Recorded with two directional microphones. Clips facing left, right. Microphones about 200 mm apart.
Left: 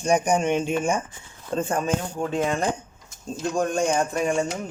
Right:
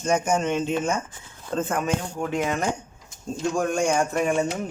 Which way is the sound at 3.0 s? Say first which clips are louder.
Right 2 dB; centre (ahead or behind).